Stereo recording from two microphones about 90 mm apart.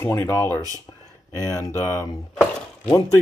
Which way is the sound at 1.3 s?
40° left (ahead or behind).